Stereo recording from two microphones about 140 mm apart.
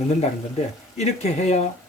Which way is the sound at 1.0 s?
55° left (ahead or behind).